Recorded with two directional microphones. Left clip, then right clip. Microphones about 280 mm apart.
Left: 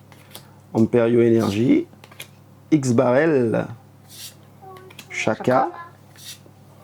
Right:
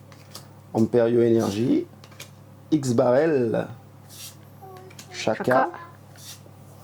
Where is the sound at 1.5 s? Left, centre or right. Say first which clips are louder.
Left 5 dB; centre.